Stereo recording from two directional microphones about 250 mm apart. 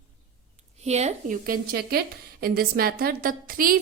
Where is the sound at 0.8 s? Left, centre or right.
Right.